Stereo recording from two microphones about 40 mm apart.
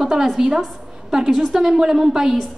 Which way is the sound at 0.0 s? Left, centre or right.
Centre.